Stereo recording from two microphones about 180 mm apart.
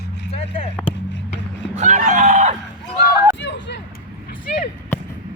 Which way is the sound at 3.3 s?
80° left.